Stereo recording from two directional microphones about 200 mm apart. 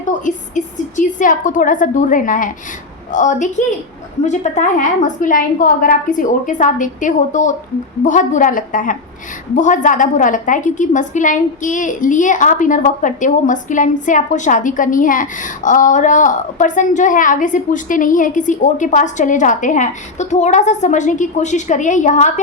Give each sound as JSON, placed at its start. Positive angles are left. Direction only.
{"t": 0.1, "sound": "a woman's voice", "side_deg": 40}